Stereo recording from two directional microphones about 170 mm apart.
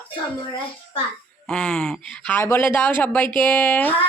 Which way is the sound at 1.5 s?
5° left (ahead or behind).